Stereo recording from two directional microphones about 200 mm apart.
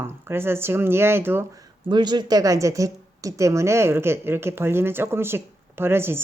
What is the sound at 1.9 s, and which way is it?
Speech, 20° right (ahead or behind).